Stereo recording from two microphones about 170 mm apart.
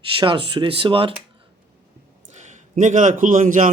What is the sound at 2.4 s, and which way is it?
A man's voice, 50° right (ahead or behind).